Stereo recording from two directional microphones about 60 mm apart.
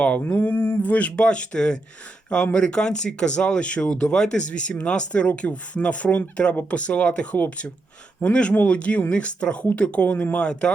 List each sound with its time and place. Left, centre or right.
0.0 s speech: left
0.3 s speech: left; by 10.7 s centre